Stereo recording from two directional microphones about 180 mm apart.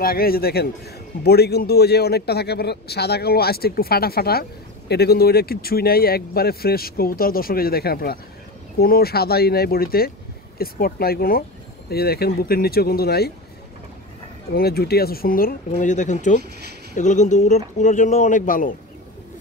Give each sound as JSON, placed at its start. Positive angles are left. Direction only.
{"t": 0.0, "sound": "a man's voice", "side_deg": 55}
{"t": 14.5, "sound": "a man's voice", "side_deg": 60}
{"t": 16.4, "sound": "speech", "side_deg": -65}
{"t": 16.9, "sound": "speech", "side_deg": 40}